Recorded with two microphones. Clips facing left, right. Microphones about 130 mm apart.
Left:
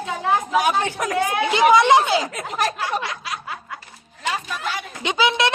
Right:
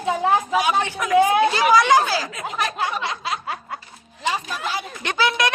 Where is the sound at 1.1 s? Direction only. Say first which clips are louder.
Right 8 dB; 20° right (ahead or behind).